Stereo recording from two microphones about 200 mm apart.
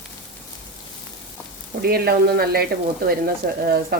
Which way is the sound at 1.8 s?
50° right (ahead or behind).